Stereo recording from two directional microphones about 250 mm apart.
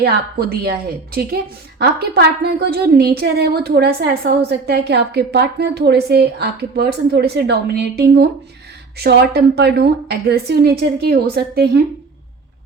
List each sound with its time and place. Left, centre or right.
0.0 s a woman's voice: right